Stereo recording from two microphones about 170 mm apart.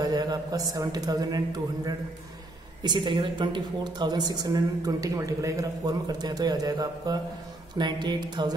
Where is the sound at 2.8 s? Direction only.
25° right (ahead or behind).